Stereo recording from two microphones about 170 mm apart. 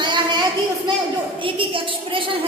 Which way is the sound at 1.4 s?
30° right (ahead or behind).